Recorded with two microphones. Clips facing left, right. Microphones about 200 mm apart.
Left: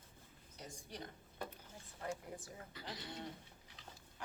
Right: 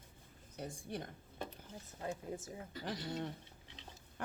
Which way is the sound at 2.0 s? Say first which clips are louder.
Right 3 dB; 25° right (ahead or behind).